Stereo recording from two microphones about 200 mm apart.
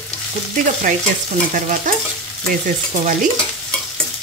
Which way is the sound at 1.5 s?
40° right (ahead or behind).